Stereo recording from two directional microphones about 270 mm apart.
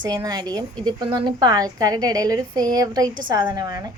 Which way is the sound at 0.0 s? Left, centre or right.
Centre.